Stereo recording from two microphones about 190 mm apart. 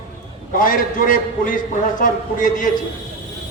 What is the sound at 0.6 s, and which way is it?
A man's voice, 45° left (ahead or behind).